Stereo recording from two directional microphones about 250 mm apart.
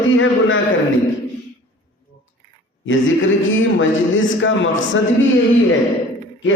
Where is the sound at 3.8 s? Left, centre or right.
Left.